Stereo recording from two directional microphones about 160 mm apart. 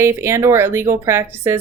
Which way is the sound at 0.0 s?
15° right (ahead or behind).